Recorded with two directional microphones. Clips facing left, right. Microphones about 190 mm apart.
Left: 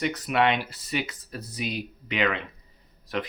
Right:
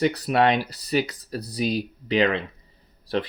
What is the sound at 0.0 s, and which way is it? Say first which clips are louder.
Speech: right 4 dB; 35° right (ahead or behind).